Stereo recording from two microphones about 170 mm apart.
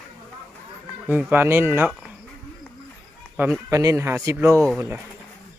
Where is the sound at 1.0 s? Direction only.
10° right (ahead or behind).